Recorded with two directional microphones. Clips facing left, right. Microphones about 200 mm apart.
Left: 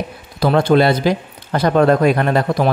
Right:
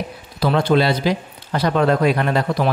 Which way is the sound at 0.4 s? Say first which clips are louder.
Left 4 dB; 45° left (ahead or behind).